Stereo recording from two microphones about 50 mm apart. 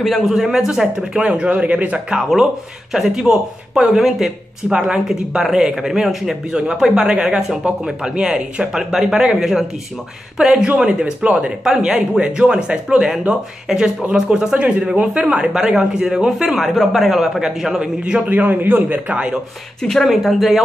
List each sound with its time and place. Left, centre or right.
0.0 s speech: centre
0.3 s speech: centre
11.6 s speech: centre
18.3 s a man's voice: right
19.8 s speech: centre